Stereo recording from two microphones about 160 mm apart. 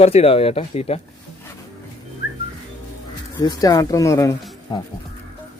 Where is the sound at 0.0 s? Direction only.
40° left (ahead or behind).